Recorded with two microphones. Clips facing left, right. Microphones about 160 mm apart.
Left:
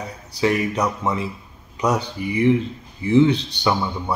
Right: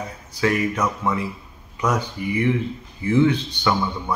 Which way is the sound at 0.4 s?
15° left (ahead or behind).